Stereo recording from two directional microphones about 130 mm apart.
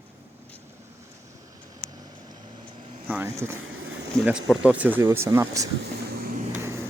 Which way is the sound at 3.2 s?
20° right (ahead or behind).